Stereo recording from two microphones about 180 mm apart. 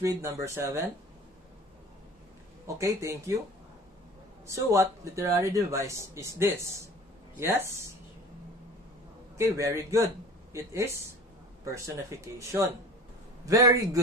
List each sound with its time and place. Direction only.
0.0 s speech: 15° right (ahead or behind)
2.6 s speech: 15° right (ahead or behind)
4.5 s speech: 15° right (ahead or behind)
9.4 s a man's voice: 15° right (ahead or behind)